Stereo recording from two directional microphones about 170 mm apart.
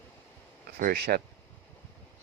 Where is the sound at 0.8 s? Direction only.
60° right (ahead or behind).